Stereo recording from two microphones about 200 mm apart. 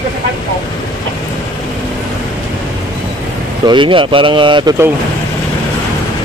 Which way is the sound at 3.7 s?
25° right (ahead or behind).